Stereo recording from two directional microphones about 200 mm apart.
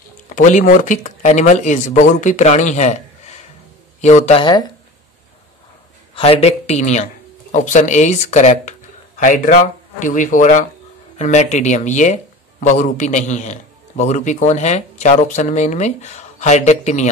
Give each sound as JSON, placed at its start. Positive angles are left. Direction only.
{"t": 0.3, "sound": "speech", "side_deg": 40}
{"t": 6.1, "sound": "speech", "side_deg": 30}